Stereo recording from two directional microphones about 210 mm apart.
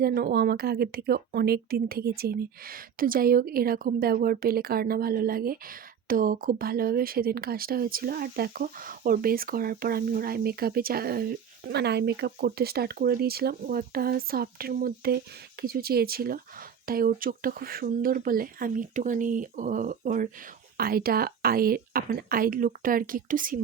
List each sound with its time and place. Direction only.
0.0 s speech: 45° right (ahead or behind)